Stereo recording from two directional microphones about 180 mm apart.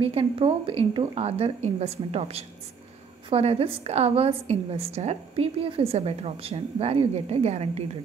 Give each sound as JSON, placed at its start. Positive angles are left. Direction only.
{"t": 0.0, "sound": "a woman's voice", "side_deg": -30}